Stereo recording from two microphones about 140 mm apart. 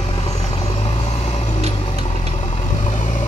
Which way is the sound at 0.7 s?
45° left (ahead or behind).